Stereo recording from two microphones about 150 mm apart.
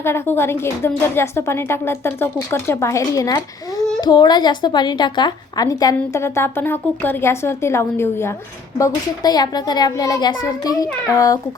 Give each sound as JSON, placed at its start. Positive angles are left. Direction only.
{"t": 0.0, "sound": "speech", "side_deg": 15}
{"t": 8.8, "sound": "a child's voice", "side_deg": 25}